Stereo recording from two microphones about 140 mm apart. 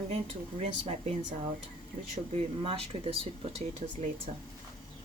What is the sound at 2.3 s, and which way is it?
Speech, 40° right (ahead or behind).